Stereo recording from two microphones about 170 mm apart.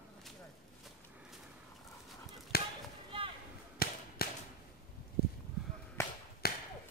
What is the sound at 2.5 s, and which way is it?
Chop, 65° left (ahead or behind).